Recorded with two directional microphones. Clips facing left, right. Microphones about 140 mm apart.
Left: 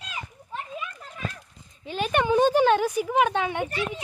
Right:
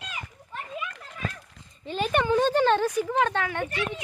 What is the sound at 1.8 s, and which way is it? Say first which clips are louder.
Speech: even; centre (ahead or behind).